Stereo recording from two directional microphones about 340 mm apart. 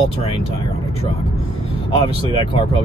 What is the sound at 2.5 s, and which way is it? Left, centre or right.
Speech, centre.